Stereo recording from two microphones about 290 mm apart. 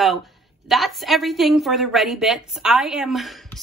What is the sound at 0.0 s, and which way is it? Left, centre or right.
A woman's voice, centre.